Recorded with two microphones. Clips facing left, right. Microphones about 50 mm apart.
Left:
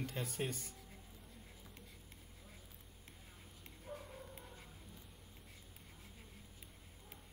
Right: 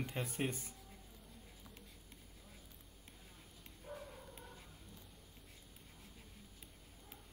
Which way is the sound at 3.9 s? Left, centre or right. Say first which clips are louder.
Even; centre.